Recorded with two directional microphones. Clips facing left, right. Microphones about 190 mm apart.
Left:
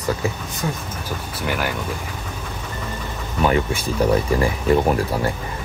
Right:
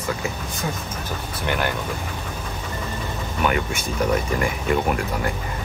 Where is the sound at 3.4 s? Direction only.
30° left (ahead or behind).